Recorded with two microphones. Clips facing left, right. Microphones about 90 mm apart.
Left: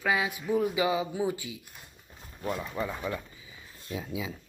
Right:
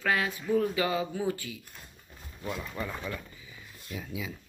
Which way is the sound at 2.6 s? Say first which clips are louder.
Left 3 dB; 20° left (ahead or behind).